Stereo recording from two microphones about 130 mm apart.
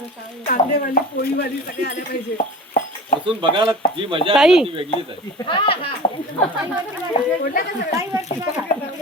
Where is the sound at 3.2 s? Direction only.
40° right (ahead or behind).